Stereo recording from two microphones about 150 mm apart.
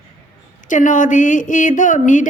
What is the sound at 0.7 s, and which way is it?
A woman's voice, 60° left (ahead or behind).